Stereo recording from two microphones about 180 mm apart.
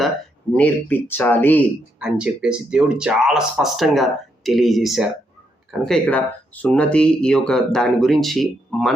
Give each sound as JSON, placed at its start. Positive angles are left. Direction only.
{"t": 0.5, "sound": "speech", "side_deg": 10}
{"t": 2.0, "sound": "speech", "side_deg": -5}